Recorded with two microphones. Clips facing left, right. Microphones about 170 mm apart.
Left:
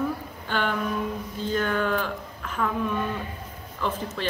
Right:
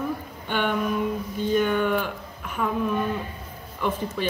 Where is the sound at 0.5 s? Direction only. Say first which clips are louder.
Right 2 dB; 10° right (ahead or behind).